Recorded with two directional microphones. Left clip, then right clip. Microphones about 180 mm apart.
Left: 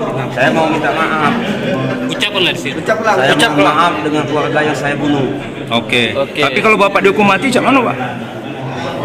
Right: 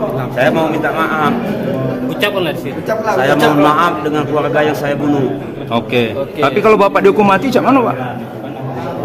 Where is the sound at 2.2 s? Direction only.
45° right (ahead or behind).